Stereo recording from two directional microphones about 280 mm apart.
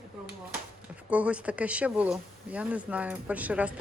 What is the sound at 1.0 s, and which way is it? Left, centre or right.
Speech, centre.